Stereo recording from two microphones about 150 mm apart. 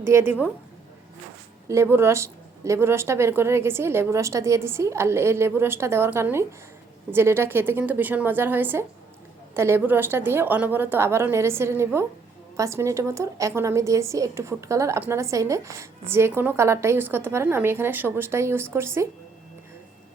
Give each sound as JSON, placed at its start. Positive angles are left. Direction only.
{"t": 0.0, "sound": "a woman's voice", "side_deg": -15}
{"t": 1.6, "sound": "a woman's voice", "side_deg": -20}